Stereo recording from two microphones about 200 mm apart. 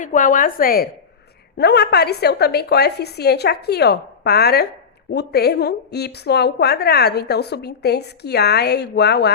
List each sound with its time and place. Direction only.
0.0 s a woman's voice: 40° left (ahead or behind); by 9.3 s 55° left (ahead or behind)